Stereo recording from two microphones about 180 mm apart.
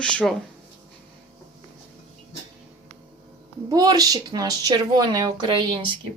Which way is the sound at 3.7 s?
20° right (ahead or behind).